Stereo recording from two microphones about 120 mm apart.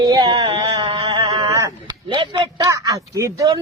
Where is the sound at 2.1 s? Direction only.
40° right (ahead or behind).